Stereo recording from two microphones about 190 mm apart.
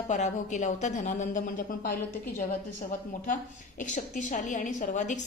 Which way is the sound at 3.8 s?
40° left (ahead or behind).